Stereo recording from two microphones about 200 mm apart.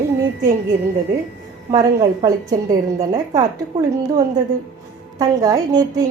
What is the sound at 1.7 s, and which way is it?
A woman's voice, 20° right (ahead or behind).